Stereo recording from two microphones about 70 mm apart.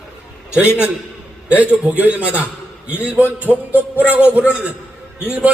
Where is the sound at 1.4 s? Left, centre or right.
Right.